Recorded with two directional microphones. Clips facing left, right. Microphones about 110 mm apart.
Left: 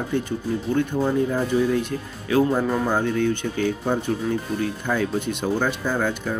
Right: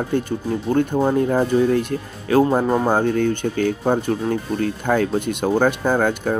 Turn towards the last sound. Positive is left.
turn(degrees=-50)  # may be behind; listen again after turning